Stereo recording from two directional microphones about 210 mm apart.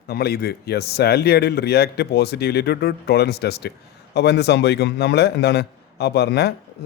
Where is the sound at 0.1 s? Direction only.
50° left (ahead or behind).